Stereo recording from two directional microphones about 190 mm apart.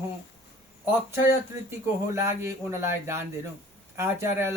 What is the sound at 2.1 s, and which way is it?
Speech, 15° right (ahead or behind).